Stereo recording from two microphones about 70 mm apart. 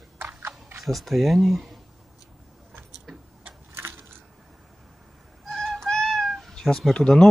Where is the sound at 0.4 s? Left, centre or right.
Right.